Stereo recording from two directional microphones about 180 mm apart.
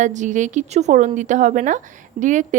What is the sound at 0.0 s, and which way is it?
Speech, 45° right (ahead or behind).